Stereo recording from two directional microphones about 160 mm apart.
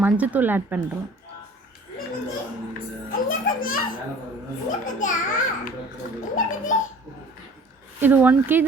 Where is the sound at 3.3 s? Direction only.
60° left (ahead or behind).